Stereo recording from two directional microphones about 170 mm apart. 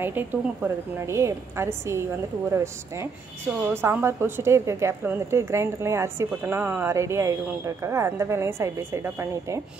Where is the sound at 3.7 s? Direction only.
15° right (ahead or behind).